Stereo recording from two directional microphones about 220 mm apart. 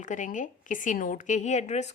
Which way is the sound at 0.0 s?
35° left (ahead or behind).